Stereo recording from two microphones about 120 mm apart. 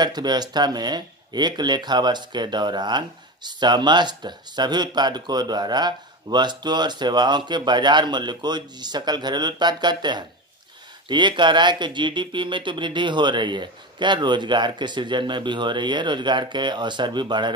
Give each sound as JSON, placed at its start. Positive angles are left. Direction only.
{"t": 0.0, "sound": "speech", "side_deg": -35}